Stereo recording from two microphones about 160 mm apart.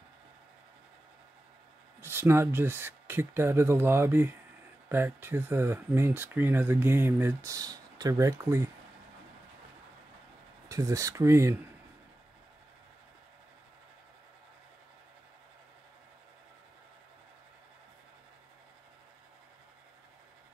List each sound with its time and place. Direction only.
2.0 s speech: 15° right (ahead or behind)
10.7 s speech: 20° right (ahead or behind)